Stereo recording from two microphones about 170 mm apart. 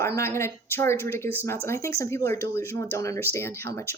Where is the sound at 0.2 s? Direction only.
15° left (ahead or behind).